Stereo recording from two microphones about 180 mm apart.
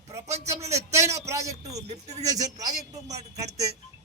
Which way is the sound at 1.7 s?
40° right (ahead or behind).